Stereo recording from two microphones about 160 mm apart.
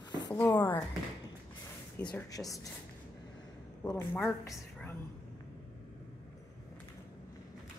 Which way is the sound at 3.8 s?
15° left (ahead or behind).